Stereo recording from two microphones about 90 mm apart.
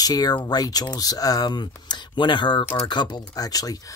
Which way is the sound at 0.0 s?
45° left (ahead or behind).